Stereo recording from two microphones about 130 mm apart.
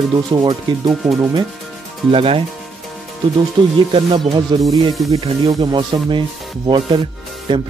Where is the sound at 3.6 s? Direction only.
35° right (ahead or behind).